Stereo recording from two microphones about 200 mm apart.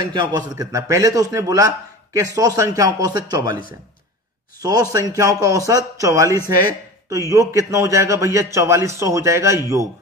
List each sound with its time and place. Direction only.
0.0 s a man's voice: 20° right (ahead or behind)
4.6 s a man's voice: 20° right (ahead or behind)